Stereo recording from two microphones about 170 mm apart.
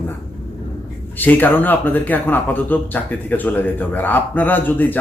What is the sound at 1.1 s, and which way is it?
A man's voice, 10° left (ahead or behind).